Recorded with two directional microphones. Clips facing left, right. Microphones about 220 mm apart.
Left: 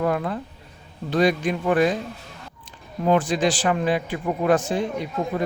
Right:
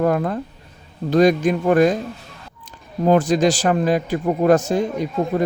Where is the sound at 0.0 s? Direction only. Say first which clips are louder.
Right 5 dB; 45° right (ahead or behind).